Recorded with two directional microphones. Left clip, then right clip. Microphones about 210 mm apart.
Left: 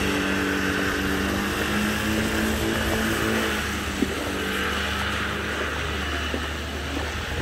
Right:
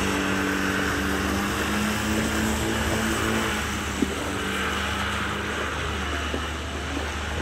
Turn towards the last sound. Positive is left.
turn(degrees=50)  # may be behind; listen again after turning